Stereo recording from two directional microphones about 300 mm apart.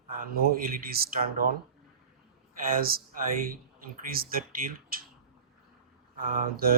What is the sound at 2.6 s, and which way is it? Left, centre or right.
Speech, right.